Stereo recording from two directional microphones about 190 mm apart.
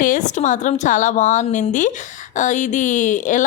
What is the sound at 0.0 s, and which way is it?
A woman's voice, 40° left (ahead or behind).